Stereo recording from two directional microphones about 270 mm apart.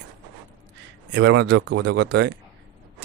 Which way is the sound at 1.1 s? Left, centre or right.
Right.